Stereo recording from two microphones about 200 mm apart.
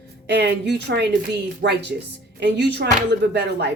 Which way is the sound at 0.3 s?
60° right (ahead or behind).